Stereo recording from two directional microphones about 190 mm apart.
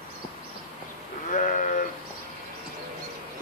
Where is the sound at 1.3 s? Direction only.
40° left (ahead or behind).